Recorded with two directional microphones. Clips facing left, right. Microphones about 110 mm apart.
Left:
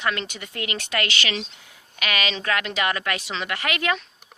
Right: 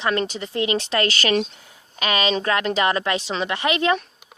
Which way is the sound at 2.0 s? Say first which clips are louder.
Right 5 dB; 30° right (ahead or behind).